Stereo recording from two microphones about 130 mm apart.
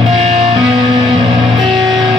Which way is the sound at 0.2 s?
55° right (ahead or behind).